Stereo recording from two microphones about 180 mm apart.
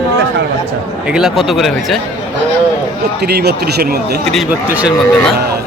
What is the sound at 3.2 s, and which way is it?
Speech, 60° right (ahead or behind).